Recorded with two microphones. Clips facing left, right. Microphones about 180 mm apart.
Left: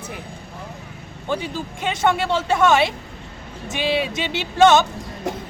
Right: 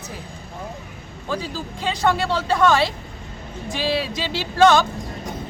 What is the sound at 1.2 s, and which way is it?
Speech, 25° left (ahead or behind).